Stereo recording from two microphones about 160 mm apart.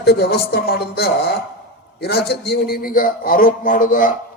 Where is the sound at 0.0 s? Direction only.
80° left.